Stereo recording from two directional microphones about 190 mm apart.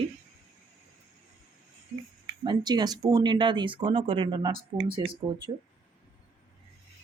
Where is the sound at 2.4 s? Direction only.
25° right (ahead or behind).